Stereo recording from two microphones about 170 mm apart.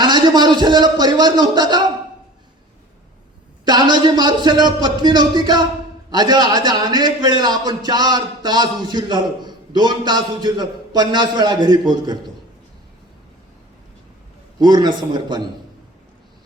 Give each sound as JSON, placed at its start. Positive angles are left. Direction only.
{"t": 0.0, "sound": "a man's voice", "side_deg": -25}
{"t": 3.7, "sound": "a man's voice", "side_deg": -25}
{"t": 14.6, "sound": "a man's voice", "side_deg": -25}